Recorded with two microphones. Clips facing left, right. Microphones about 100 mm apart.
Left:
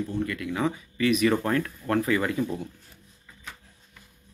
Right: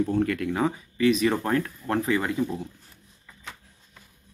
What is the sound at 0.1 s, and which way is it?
Speech, 70° right (ahead or behind).